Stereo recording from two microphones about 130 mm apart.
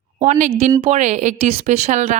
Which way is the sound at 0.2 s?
75° right (ahead or behind).